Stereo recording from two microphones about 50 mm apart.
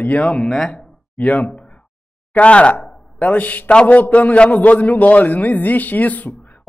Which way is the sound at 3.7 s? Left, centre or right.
Left.